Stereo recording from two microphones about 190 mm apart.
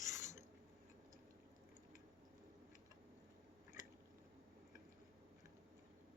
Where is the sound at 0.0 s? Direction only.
15° right (ahead or behind).